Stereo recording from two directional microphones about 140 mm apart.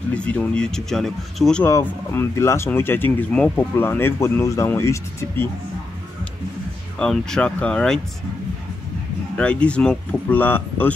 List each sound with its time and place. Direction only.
0.1 s speech: 10° left (ahead or behind)
1.6 s speech: 15° left (ahead or behind)
7.0 s speech: 5° left (ahead or behind)
9.4 s speech: 5° left (ahead or behind)